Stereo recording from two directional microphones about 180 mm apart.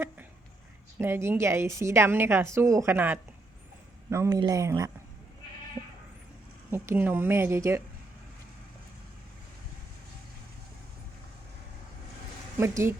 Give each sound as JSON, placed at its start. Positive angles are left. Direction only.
{"t": 0.9, "sound": "a woman's voice", "side_deg": -15}
{"t": 6.7, "sound": "a woman's voice", "side_deg": -10}
{"t": 12.5, "sound": "a woman's voice", "side_deg": -15}